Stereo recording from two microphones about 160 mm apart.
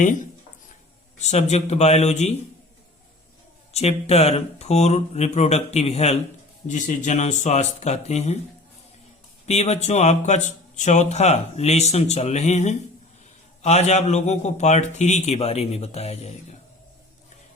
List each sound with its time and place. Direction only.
1.2 s speech: 45° left (ahead or behind)
3.7 s speech: 40° left (ahead or behind)
9.5 s speech: 45° left (ahead or behind)